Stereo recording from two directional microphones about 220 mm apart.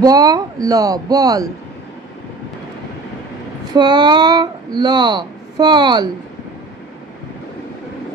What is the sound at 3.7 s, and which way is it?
Speech, 20° right (ahead or behind).